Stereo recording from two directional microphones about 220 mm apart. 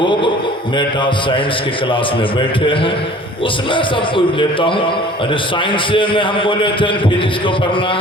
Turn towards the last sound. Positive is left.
turn(degrees=25)  # may be behind; listen again after turning